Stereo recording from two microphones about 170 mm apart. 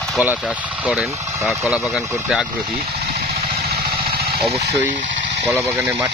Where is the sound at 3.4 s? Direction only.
65° right (ahead or behind).